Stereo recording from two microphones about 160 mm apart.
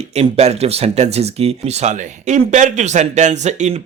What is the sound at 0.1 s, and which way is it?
Speech, 40° right (ahead or behind).